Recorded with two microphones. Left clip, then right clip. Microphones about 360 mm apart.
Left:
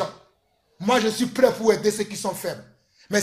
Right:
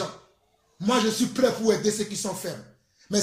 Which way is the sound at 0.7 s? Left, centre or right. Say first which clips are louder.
Left 3 dB; centre.